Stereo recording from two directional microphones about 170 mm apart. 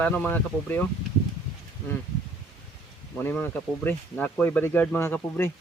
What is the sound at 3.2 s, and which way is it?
Speech, 10° left (ahead or behind).